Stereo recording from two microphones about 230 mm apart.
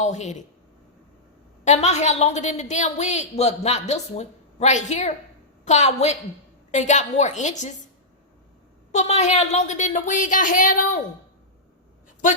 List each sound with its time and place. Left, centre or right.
0.0 s a woman's voice: left
1.6 s a woman's voice: left
8.9 s a woman's voice: left